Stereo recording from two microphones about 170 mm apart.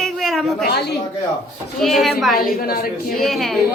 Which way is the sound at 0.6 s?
70° left (ahead or behind).